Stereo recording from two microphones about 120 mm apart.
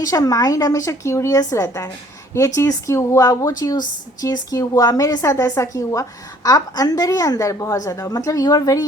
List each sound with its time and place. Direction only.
0.0 s a woman's voice: 30° left (ahead or behind)